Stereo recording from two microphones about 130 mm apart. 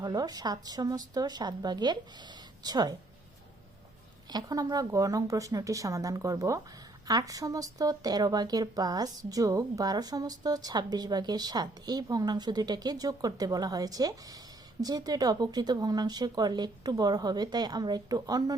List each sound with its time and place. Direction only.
0.0 s speech: 30° right (ahead or behind)
4.3 s speech: 30° right (ahead or behind)